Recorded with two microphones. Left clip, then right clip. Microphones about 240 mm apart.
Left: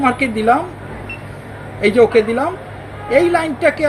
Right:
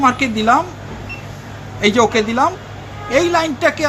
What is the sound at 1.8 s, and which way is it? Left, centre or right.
Speech, right.